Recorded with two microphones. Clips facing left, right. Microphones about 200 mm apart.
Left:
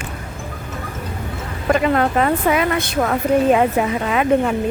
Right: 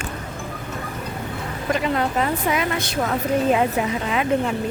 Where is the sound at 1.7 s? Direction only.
60° left (ahead or behind).